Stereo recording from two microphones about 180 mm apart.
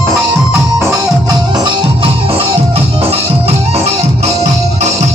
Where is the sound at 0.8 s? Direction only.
20° right (ahead or behind); by 5.0 s 40° right (ahead or behind).